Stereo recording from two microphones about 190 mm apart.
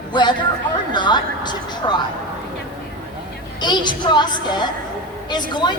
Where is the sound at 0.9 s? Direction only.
25° left (ahead or behind).